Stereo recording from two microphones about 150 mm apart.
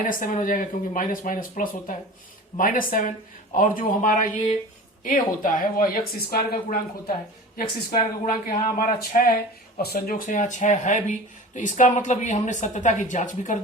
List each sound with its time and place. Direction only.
0.0 s speech: 65° left (ahead or behind); by 10.2 s 85° left
10.2 s speech: 55° left (ahead or behind)